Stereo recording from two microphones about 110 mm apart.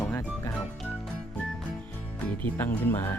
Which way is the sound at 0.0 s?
20° left (ahead or behind).